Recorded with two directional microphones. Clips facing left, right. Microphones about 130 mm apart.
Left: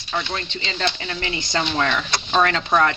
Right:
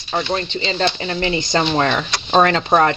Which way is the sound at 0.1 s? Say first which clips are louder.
Right 6 dB; 30° right (ahead or behind).